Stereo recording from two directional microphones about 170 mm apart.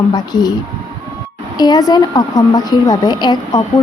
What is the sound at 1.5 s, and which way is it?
A woman's voice, 25° left (ahead or behind).